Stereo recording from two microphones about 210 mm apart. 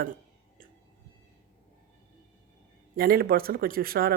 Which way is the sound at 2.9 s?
45° right (ahead or behind).